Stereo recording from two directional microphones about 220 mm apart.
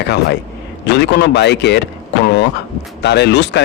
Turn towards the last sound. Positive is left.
turn(degrees=50)  # may be behind; listen again after turning